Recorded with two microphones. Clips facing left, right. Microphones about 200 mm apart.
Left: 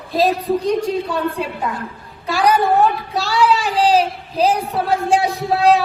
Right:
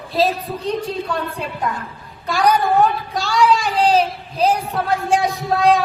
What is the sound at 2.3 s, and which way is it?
Speech, centre (ahead or behind).